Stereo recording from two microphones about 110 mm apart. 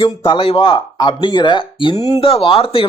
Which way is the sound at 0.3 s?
50° left (ahead or behind).